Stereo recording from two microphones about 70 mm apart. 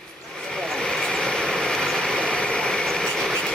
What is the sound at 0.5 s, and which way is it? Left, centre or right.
Vehicle, centre.